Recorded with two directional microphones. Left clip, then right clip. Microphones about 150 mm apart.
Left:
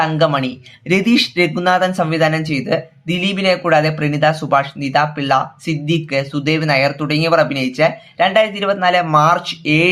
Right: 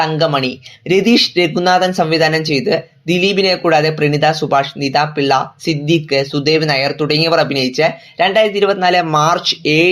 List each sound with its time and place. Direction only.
0.0 s speech: 20° right (ahead or behind)